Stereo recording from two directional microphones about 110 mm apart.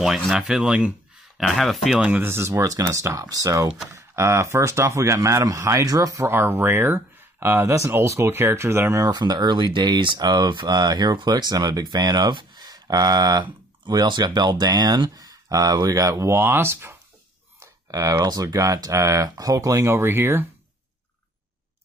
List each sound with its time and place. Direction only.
0.4 s speech: 10° right (ahead or behind)
2.0 s speech: 15° right (ahead or behind)
9.0 s speech: 40° right (ahead or behind); by 16.9 s 20° right (ahead or behind)
17.9 s speech: 35° right (ahead or behind)